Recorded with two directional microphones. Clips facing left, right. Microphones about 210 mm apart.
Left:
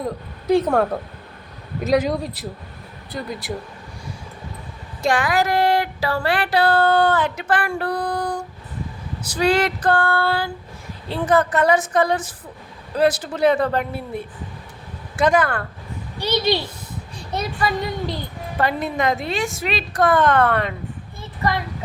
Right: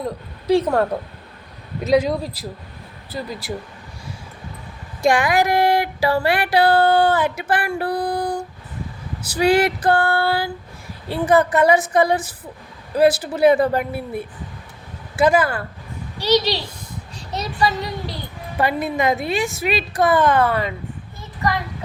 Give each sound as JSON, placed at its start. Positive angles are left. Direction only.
{"t": 0.0, "sound": "speech", "side_deg": 0}
{"t": 5.0, "sound": "child singing", "side_deg": -15}
{"t": 15.1, "sound": "speech", "side_deg": -5}
{"t": 16.1, "sound": "a woman's voice", "side_deg": 55}
{"t": 18.5, "sound": "child singing", "side_deg": -10}